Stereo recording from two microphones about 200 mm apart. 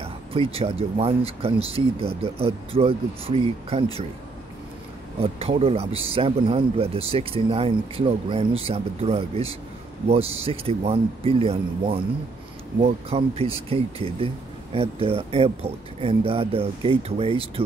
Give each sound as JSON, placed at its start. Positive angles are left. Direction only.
{"t": 0.0, "sound": "speech", "side_deg": -30}
{"t": 5.2, "sound": "speech", "side_deg": -30}